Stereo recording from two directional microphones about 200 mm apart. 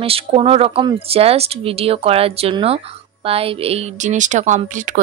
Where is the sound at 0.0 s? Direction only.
30° right (ahead or behind).